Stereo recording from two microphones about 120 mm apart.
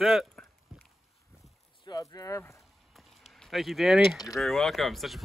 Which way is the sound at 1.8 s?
35° left (ahead or behind).